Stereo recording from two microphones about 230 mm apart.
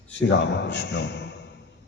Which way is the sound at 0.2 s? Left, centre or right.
Left.